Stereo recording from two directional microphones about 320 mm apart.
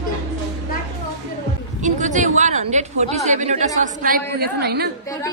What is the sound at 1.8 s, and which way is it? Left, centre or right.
A woman's voice, right.